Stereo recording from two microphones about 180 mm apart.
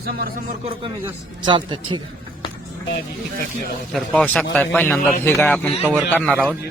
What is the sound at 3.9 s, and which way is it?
A man's voice, 5° left (ahead or behind).